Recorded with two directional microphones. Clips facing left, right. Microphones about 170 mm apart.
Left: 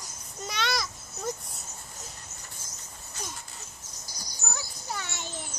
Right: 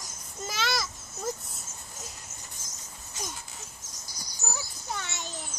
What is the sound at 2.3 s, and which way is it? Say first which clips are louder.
Bird: even; 90° right.